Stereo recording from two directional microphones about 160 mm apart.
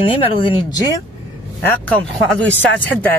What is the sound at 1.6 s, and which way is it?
Speech, 10° left (ahead or behind).